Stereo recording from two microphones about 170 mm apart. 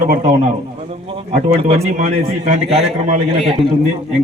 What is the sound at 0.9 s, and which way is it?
A man's voice, 35° right (ahead or behind).